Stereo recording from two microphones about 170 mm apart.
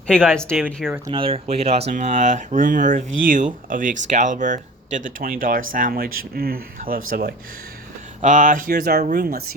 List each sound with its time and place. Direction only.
0.1 s speech: 5° left (ahead or behind)
0.9 s speech: 10° right (ahead or behind)
1.1 s speech: 35° right (ahead or behind); by 7.3 s 60° right (ahead or behind)
8.2 s speech: 50° right (ahead or behind)